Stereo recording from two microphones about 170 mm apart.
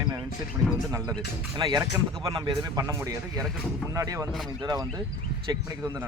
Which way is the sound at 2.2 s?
25° right (ahead or behind).